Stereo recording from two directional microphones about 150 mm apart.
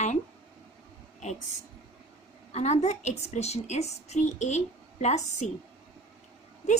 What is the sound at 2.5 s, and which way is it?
A woman's voice, 50° left (ahead or behind).